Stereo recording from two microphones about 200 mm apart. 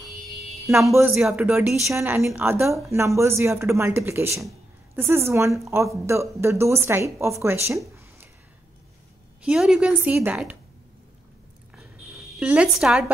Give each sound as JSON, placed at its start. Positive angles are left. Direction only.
{"t": 0.7, "sound": "a woman's voice", "side_deg": -15}
{"t": 9.4, "sound": "a woman's voice", "side_deg": -5}
{"t": 12.2, "sound": "a woman's voice", "side_deg": -5}